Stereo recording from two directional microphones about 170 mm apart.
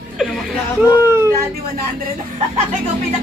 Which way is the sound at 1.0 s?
15° right (ahead or behind).